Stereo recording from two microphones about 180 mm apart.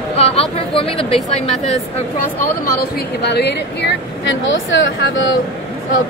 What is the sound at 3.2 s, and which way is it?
Speech, 70° left (ahead or behind).